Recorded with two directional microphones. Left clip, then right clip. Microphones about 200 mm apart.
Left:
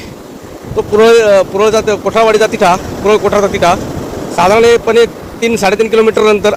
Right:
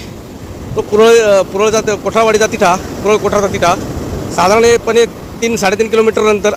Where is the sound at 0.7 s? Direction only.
5° left (ahead or behind).